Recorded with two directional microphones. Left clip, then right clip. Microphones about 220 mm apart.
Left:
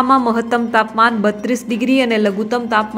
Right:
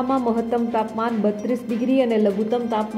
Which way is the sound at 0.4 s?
15° left (ahead or behind).